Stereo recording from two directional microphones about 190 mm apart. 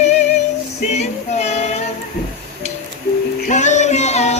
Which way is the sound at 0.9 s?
35° left (ahead or behind).